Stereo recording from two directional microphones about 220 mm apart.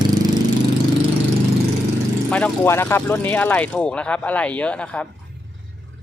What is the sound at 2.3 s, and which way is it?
Speech, 10° left (ahead or behind).